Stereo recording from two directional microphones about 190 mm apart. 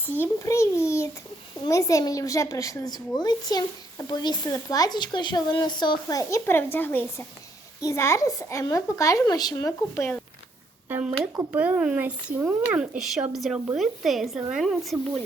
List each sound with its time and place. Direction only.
0.0 s a woman's voice: 10° left (ahead or behind)
10.8 s a woman's voice: 5° right (ahead or behind)